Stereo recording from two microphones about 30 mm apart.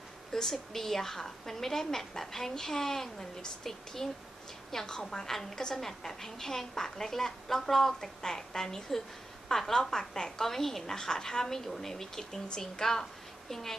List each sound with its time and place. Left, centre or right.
0.3 s a woman's voice: centre
5.8 s a woman's voice: centre
13.5 s speech: centre